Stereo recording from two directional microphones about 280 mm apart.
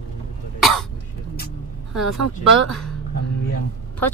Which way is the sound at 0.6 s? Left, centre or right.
Centre.